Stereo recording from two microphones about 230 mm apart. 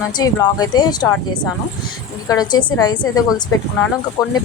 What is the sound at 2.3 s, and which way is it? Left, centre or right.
Speech, centre.